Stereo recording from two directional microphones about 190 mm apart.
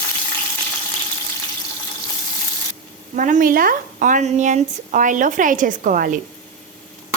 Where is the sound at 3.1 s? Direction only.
45° right (ahead or behind).